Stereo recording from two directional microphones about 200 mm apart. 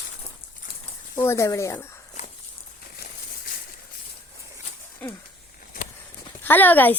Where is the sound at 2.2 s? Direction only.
35° left (ahead or behind).